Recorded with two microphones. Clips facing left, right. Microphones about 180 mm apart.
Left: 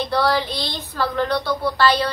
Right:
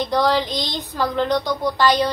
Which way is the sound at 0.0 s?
15° right (ahead or behind).